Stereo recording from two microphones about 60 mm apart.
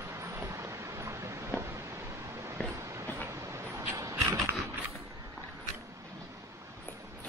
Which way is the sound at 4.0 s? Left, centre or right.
Right.